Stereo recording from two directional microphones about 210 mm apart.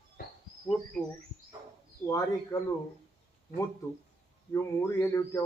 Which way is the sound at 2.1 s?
15° left (ahead or behind).